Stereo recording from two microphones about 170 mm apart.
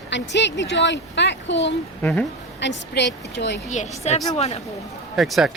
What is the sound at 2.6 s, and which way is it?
Speech, 90° left.